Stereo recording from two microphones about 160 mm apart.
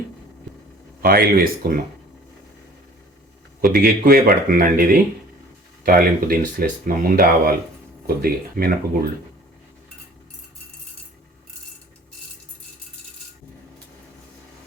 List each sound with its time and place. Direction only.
1.0 s speech: 65° right (ahead or behind)
3.6 s speech: 60° right (ahead or behind)